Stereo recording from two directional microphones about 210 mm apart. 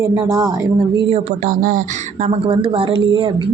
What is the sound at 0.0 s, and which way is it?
Speech, 15° right (ahead or behind).